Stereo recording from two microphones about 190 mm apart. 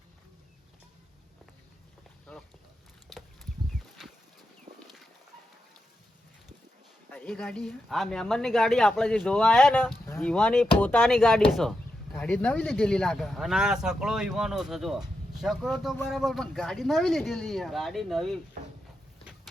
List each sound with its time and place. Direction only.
3.1 s a sound: centre (ahead or behind)
4.0 s livestock: centre (ahead or behind)
7.1 s speech: 5° left (ahead or behind)